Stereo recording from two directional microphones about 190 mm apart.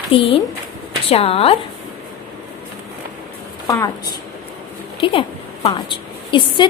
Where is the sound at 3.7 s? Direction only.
20° left (ahead or behind).